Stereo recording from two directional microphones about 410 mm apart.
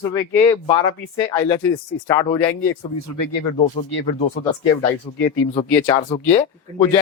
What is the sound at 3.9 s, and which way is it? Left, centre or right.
Speech, left.